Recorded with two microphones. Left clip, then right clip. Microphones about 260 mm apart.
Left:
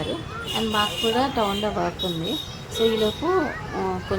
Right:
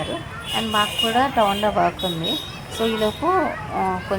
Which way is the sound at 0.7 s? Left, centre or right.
Centre.